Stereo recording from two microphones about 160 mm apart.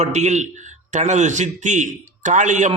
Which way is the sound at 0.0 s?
45° right (ahead or behind).